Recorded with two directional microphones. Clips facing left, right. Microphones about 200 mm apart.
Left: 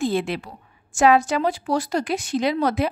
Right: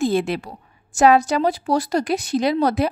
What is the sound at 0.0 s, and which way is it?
A woman's voice, 40° right (ahead or behind).